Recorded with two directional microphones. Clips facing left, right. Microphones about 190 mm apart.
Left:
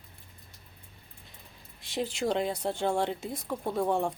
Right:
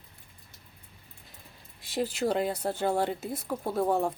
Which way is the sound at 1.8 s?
5° right (ahead or behind).